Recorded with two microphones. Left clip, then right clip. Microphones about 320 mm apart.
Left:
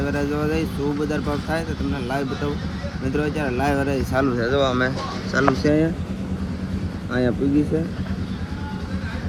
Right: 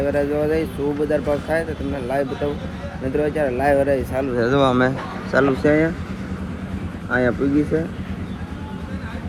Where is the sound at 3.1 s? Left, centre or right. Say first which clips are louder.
Right 4 dB; centre.